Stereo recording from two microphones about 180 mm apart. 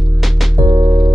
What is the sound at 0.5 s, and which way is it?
Music, 25° right (ahead or behind).